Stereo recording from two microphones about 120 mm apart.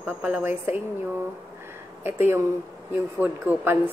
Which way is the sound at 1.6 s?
20° right (ahead or behind).